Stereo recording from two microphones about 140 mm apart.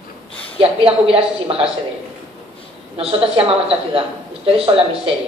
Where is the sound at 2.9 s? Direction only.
45° right (ahead or behind).